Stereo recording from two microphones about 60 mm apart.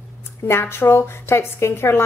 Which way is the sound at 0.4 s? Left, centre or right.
Left.